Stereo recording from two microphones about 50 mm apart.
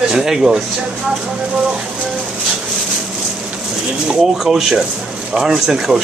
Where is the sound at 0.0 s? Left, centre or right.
Centre.